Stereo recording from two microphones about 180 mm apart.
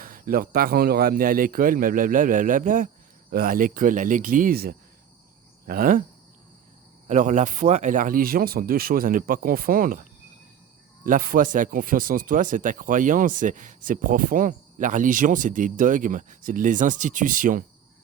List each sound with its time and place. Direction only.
0.0 s speech: 50° right (ahead or behind)
7.1 s speech: 45° right (ahead or behind)